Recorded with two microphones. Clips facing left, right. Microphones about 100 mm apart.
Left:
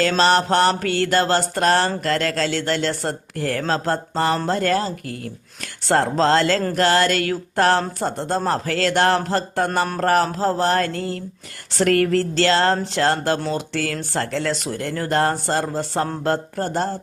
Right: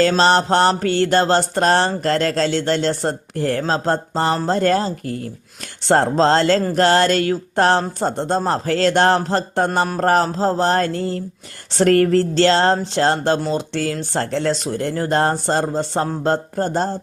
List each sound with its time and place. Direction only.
0.0 s speech: 30° right (ahead or behind)